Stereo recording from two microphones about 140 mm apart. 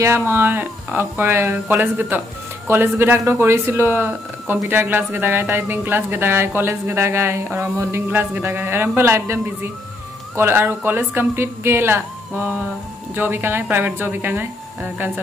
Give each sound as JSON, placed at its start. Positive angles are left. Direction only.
{"t": 0.0, "sound": "speech", "side_deg": -15}